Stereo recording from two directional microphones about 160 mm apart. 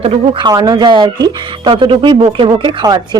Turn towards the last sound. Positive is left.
turn(degrees=-25)  # may be behind; listen again after turning